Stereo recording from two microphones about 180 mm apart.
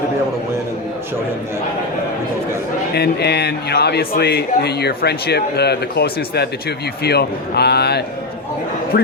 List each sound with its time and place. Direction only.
2.9 s speech: 65° left (ahead or behind)